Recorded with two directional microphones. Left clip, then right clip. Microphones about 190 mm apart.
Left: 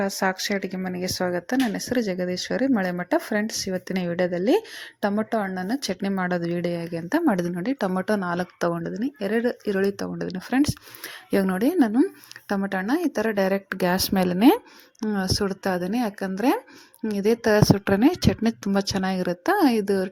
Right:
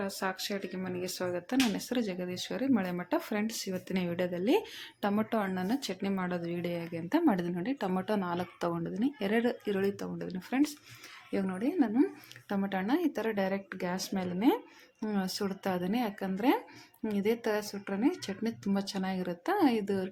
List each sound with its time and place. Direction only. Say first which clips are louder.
0.0 s a woman's voice: left 10 dB; 35° left (ahead or behind)
12.5 s a woman's voice: left 7 dB; 35° left (ahead or behind)
15.0 s a woman's voice: left 9 dB; 30° left (ahead or behind)